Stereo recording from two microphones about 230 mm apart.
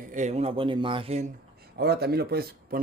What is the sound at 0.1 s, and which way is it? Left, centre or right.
Speech, right.